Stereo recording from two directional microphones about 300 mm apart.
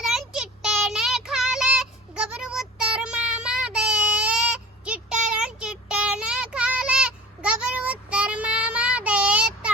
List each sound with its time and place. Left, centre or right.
0.0 s child singing: centre